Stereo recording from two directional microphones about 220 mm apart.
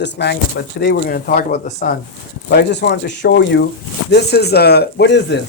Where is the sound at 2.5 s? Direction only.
50° left (ahead or behind).